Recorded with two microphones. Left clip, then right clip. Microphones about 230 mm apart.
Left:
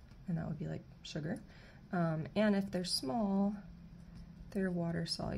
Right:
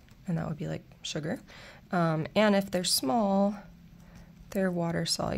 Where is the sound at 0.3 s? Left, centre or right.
Right.